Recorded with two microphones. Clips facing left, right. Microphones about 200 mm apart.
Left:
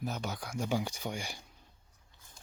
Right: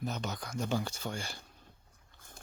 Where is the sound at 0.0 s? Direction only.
10° left (ahead or behind).